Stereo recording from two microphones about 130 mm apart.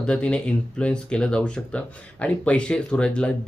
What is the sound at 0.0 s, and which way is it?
Speech, 10° left (ahead or behind).